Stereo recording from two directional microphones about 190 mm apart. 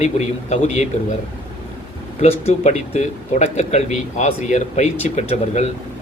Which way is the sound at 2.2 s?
35° left (ahead or behind).